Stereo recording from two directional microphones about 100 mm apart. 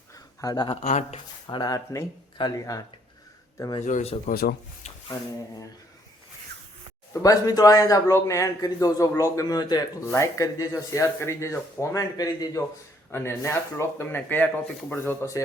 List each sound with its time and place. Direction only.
0.4 s speech: 45° left (ahead or behind)
0.7 s speech: 90° left
1.5 s speech: 45° left (ahead or behind)
2.4 s speech: 55° left (ahead or behind)
3.8 s speech: 80° left
7.1 s speech: 35° left (ahead or behind)
10.1 s speech: 30° left (ahead or behind)
13.1 s speech: 25° left (ahead or behind)